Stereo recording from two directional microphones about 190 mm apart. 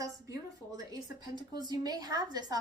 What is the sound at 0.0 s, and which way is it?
A woman's voice, 20° right (ahead or behind).